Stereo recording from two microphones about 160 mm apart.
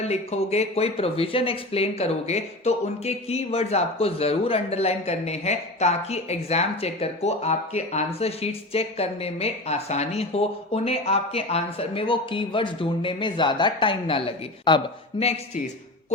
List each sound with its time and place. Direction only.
0.0 s a man's voice: 40° left (ahead or behind)